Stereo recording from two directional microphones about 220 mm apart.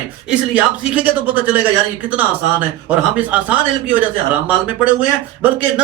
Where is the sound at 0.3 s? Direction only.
5° right (ahead or behind).